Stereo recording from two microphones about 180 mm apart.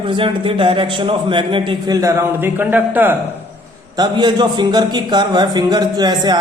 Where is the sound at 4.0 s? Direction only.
25° right (ahead or behind).